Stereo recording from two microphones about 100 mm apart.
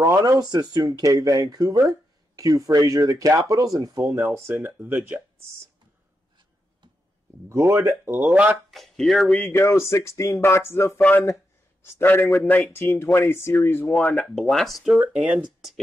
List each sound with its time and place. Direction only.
0.0 s speech: 35° right (ahead or behind); by 5.2 s 20° right (ahead or behind)
7.4 s speech: 30° right (ahead or behind)
8.2 s speech: 15° right (ahead or behind)
8.6 s speech: centre (ahead or behind)
9.4 s speech: 25° left (ahead or behind)
13.8 s speech: 10° left (ahead or behind)
15.0 s speech: 10° right (ahead or behind)